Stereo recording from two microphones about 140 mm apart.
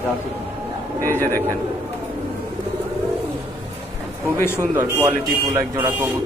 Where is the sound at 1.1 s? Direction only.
15° left (ahead or behind).